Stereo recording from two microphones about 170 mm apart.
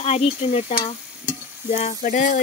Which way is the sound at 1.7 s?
45° left (ahead or behind).